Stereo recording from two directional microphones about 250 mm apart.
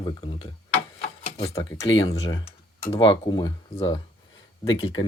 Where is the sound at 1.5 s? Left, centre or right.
Centre.